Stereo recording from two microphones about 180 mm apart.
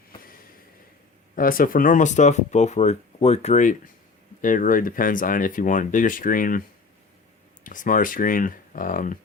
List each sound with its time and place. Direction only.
1.4 s speech: 50° left (ahead or behind)
7.6 s speech: 50° left (ahead or behind)